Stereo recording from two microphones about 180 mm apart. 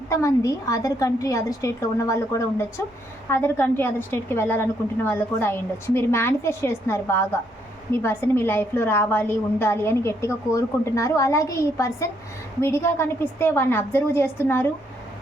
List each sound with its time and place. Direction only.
0.1 s a woman's voice: 15° left (ahead or behind)